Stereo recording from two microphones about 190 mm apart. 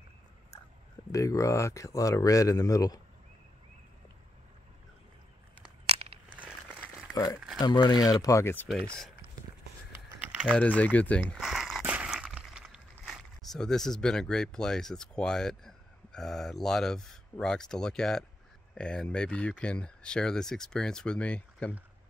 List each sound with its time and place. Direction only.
1.1 s speech: 15° left (ahead or behind)
5.9 s a sound: 30° right (ahead or behind)
6.3 s crumpling: 5° right (ahead or behind)
7.3 s a sound: centre (ahead or behind)
7.6 s speech: 20° left (ahead or behind)
8.6 s speech: centre (ahead or behind)
9.9 s typing: 5° right (ahead or behind)
10.8 s speech: 10° left (ahead or behind)